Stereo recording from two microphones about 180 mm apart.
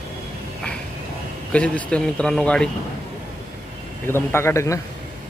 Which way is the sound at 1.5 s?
5° left (ahead or behind).